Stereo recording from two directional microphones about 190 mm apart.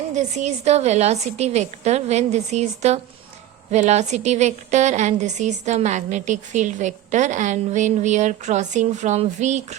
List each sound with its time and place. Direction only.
0.1 s a woman's voice: 40° right (ahead or behind)